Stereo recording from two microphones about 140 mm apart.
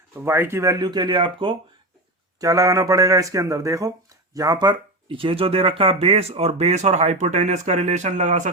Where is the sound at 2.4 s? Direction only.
25° right (ahead or behind).